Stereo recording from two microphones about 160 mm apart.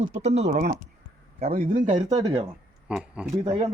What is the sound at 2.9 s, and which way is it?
Speech, 5° right (ahead or behind).